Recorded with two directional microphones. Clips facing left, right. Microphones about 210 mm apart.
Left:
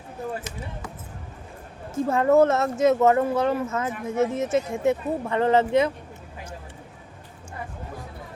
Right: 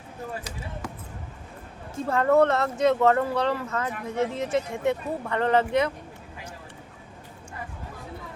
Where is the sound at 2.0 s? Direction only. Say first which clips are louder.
Left 2 dB; 20° left (ahead or behind).